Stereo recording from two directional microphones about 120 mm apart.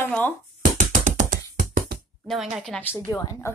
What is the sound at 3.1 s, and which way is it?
Speech, 25° left (ahead or behind).